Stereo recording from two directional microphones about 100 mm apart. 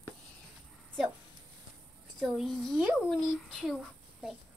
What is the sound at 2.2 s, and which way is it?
Speech, 5° right (ahead or behind).